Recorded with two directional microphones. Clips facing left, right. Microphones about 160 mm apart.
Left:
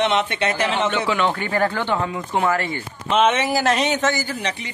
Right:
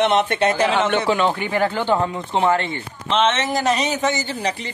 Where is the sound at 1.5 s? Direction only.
20° right (ahead or behind).